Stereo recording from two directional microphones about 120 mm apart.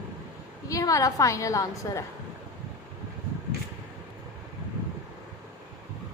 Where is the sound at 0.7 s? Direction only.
30° left (ahead or behind).